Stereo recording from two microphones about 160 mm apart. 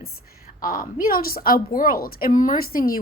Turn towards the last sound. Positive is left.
turn(degrees=65)  # may be behind; listen again after turning